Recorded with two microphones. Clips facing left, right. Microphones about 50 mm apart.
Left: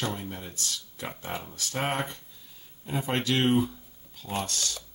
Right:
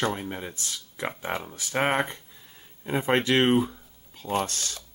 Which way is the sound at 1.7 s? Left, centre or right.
Right.